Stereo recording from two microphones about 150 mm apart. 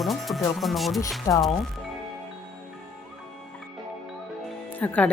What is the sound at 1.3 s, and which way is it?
Speech, 20° left (ahead or behind).